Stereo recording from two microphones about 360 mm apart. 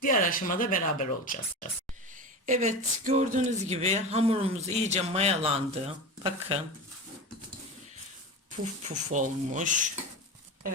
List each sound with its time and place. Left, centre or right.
0.0 s speech: left
2.5 s speech: centre
9.1 s speech: right